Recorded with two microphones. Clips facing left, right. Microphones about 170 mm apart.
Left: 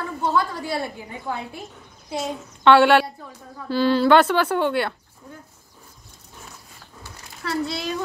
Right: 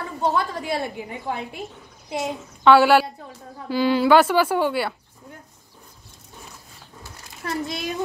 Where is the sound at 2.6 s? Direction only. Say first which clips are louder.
Even; 5° right (ahead or behind).